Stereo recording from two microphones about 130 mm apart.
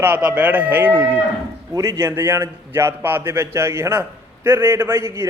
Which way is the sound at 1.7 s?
25° right (ahead or behind).